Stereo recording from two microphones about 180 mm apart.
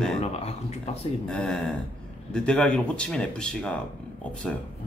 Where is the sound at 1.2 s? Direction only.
5° left (ahead or behind).